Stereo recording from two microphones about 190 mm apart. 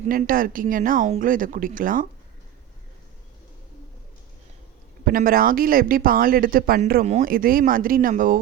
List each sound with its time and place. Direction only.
0.1 s speech: 45° right (ahead or behind)
5.0 s speech: 50° right (ahead or behind)